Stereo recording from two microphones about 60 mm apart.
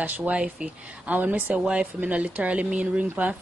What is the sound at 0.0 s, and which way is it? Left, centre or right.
Speech, right.